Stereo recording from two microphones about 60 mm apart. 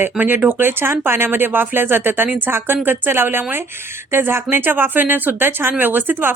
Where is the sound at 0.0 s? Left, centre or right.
Right.